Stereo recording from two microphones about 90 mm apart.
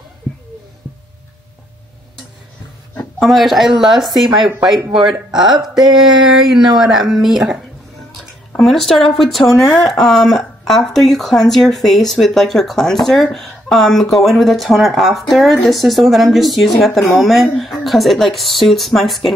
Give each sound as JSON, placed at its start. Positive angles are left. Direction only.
{"t": 3.2, "sound": "speech", "side_deg": 0}
{"t": 8.5, "sound": "speech", "side_deg": 5}